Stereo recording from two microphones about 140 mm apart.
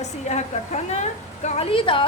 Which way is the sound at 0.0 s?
55° left (ahead or behind).